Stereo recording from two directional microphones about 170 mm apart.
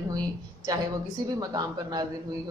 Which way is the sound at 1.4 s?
25° right (ahead or behind).